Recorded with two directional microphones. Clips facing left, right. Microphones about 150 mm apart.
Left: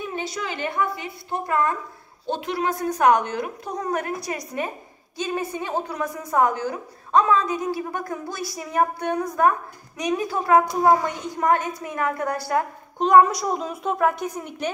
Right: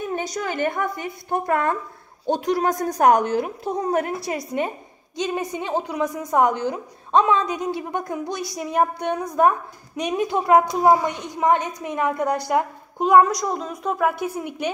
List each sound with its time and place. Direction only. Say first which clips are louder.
0.0 s a woman's voice: right 3 dB; 45° right (ahead or behind)
2.3 s a woman's voice: right 4 dB; 40° right (ahead or behind); by 12.6 s 15° right (ahead or behind)
13.0 s speech: even; centre (ahead or behind)